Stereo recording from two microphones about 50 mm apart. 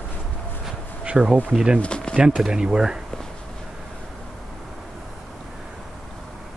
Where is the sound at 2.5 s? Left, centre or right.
Centre.